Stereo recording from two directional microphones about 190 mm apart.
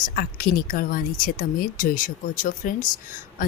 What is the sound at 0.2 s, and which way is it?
Speech, 50° left (ahead or behind).